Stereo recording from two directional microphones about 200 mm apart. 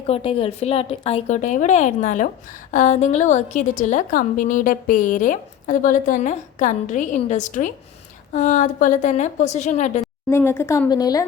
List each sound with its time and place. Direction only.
0.1 s a woman's voice: 25° left (ahead or behind)
10.2 s speech: 10° left (ahead or behind)